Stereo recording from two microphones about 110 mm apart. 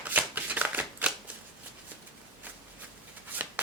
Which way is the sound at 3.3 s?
15° right (ahead or behind).